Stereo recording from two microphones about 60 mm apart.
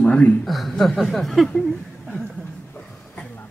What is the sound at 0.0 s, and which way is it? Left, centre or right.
Speech, centre.